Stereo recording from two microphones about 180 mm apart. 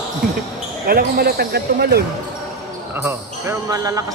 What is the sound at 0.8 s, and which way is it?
Speech, 60° right (ahead or behind).